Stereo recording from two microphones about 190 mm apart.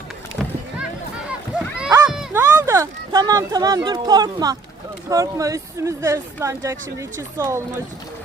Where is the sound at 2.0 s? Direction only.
10° right (ahead or behind).